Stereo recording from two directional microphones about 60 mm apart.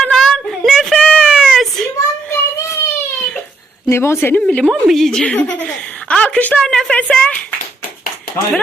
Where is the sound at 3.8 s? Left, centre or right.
Left.